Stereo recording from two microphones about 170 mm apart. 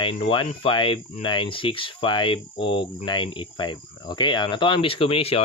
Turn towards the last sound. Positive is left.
turn(degrees=35)  # may be behind; listen again after turning